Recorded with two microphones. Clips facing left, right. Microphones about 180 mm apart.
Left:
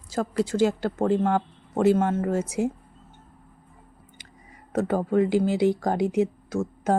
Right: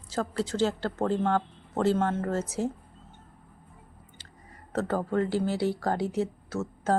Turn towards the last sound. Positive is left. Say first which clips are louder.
# left 4 dB
turn(degrees=15)  # may be behind; listen again after turning